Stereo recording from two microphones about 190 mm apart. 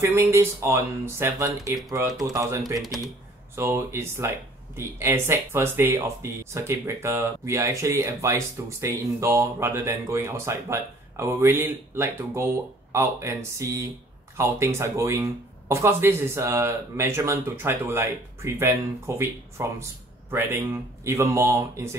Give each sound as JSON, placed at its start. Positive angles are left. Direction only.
{"t": 0.0, "sound": "speech", "side_deg": -15}
{"t": 19.8, "sound": "a sound", "side_deg": -15}
{"t": 21.0, "sound": "speech", "side_deg": -15}